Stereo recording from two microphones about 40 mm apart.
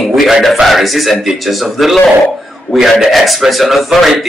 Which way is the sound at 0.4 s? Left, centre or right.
Centre.